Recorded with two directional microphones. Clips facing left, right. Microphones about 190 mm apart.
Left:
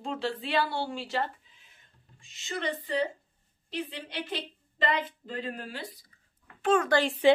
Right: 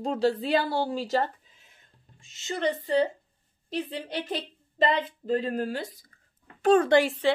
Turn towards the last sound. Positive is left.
turn(degrees=-20)  # may be behind; listen again after turning